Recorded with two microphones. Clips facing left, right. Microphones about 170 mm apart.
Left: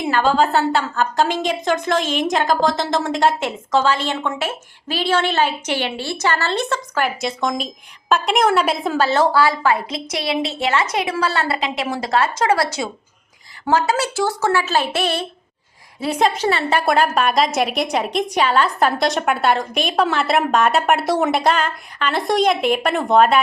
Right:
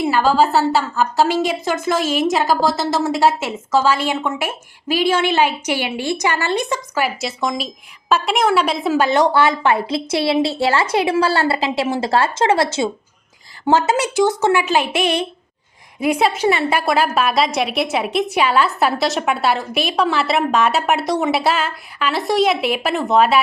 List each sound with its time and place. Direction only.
0.0 s a woman's voice: 5° right (ahead or behind)
9.0 s a woman's voice: 15° right (ahead or behind)
13.7 s a woman's voice: 25° right (ahead or behind); by 23.4 s centre (ahead or behind)